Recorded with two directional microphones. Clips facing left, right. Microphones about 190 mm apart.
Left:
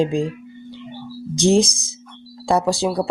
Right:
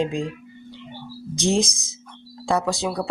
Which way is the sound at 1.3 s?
30° left (ahead or behind).